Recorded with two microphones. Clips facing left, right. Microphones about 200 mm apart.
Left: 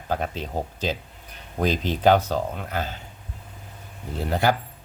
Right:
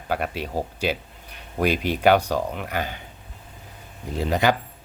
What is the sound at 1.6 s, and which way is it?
Speech, 10° right (ahead or behind).